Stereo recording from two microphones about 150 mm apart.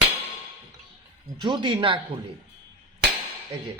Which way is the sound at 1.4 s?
30° right (ahead or behind).